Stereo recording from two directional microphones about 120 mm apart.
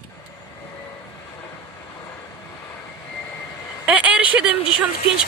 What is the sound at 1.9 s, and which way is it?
Vehicle, 20° left (ahead or behind).